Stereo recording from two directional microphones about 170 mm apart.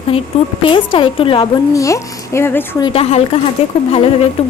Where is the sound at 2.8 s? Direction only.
30° left (ahead or behind).